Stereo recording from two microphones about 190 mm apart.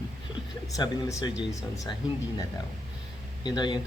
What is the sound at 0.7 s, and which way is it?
Speech, 20° left (ahead or behind).